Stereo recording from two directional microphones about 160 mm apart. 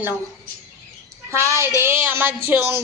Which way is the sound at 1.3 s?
15° right (ahead or behind).